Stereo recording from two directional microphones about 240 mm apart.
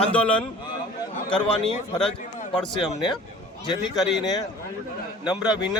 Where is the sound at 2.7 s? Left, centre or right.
Centre.